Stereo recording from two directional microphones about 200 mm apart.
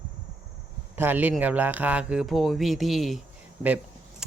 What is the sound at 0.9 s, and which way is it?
Speech, 10° right (ahead or behind).